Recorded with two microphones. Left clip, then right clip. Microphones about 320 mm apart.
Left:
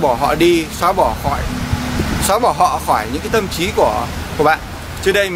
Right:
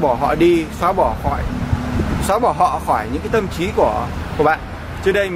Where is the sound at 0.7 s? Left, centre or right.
Centre.